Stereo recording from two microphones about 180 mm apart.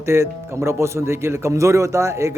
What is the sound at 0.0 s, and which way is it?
A man's voice, 15° right (ahead or behind).